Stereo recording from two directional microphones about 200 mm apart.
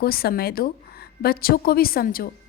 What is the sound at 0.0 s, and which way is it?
A woman's voice, 50° left (ahead or behind).